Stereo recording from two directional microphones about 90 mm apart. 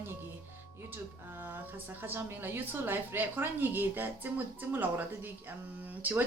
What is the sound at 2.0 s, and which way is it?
A woman's voice, 25° right (ahead or behind).